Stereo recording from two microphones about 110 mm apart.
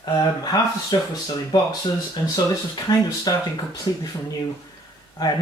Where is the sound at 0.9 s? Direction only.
35° left (ahead or behind).